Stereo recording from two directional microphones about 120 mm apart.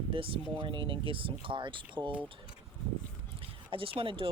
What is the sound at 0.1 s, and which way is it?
Speech, 50° right (ahead or behind).